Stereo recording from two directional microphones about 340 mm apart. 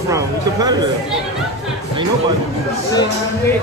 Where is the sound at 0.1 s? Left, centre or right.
Centre.